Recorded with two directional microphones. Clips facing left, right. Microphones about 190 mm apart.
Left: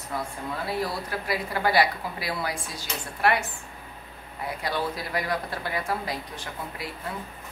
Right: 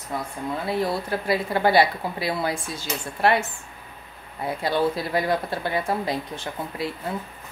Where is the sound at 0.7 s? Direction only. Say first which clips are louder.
Right 6 dB; 25° right (ahead or behind).